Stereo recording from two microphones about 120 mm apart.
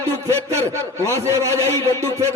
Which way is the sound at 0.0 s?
25° right (ahead or behind).